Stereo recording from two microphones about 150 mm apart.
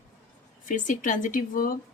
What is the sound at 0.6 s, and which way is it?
Speech, 60° left (ahead or behind).